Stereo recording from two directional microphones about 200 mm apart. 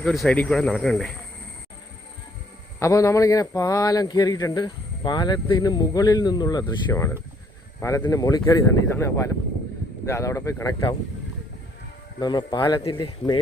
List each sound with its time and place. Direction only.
0.0 s speech: 5° left (ahead or behind)
2.7 s a man's voice: 15° left (ahead or behind)
12.2 s a man's voice: 20° left (ahead or behind)